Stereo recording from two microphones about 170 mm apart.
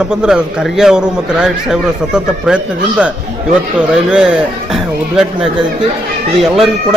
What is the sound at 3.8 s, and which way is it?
A man's voice, 5° right (ahead or behind).